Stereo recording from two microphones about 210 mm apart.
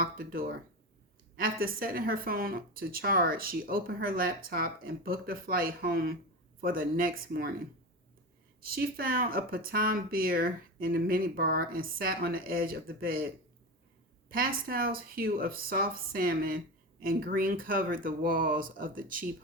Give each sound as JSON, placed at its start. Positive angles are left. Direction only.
{"t": 0.0, "sound": "speech", "side_deg": -45}
{"t": 8.7, "sound": "speech", "side_deg": -45}